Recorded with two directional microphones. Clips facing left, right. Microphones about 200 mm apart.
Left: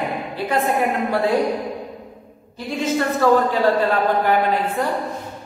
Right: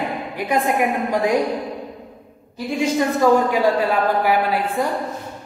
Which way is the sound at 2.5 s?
10° right (ahead or behind).